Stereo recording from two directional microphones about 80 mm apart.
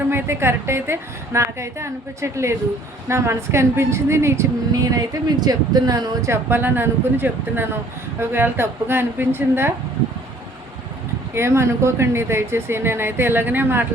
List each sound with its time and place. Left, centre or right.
0.1 s speech: right
4.7 s speech: right
6.2 s speech: right
11.3 s speech: right